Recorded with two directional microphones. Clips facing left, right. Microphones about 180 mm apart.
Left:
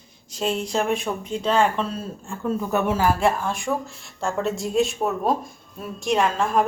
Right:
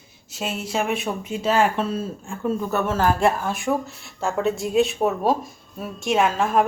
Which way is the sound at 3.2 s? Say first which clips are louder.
Right 1 dB; 5° right (ahead or behind).